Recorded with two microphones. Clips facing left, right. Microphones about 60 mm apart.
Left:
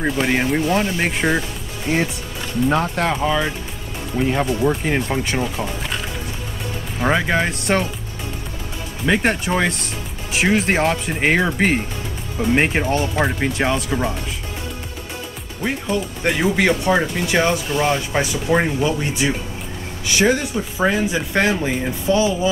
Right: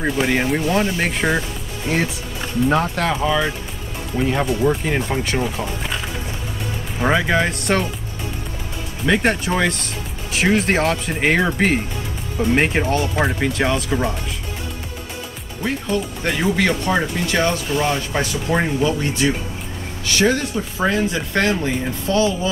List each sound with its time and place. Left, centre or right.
0.0 s speech: centre
2.6 s speech: centre
7.0 s speech: centre
9.0 s speech: centre
15.6 s speech: centre
17.3 s speech: centre